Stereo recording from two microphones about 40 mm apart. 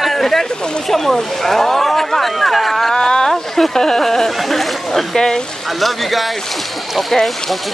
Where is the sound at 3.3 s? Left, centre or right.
Centre.